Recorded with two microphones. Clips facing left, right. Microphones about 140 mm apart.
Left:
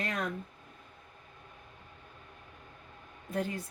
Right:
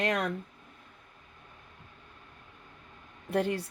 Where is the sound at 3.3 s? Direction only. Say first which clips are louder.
Right 6 dB; 70° right (ahead or behind).